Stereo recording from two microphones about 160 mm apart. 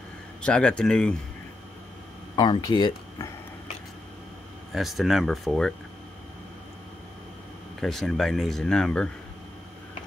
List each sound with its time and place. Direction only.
0.4 s speech: 5° left (ahead or behind)
2.3 s speech: 30° left (ahead or behind)
4.7 s speech: centre (ahead or behind)
7.8 s speech: centre (ahead or behind)